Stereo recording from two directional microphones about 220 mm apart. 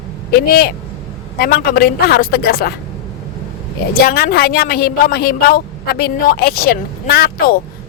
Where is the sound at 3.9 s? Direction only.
45° left (ahead or behind).